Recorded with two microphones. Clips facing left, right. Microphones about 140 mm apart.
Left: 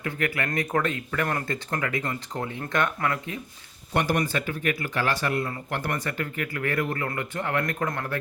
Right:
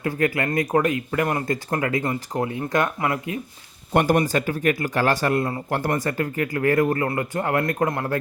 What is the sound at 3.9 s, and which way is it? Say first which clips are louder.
Speech: right 6 dB; 45° right (ahead or behind).